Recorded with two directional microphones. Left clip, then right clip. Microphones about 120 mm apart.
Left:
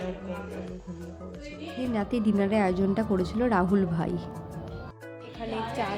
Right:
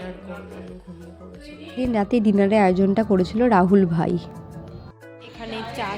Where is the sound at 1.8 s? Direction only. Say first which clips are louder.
Right 8 dB; 45° right (ahead or behind).